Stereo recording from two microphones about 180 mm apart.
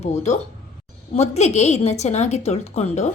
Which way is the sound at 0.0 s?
40° left (ahead or behind).